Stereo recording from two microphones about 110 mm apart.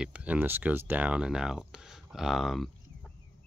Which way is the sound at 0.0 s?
10° right (ahead or behind).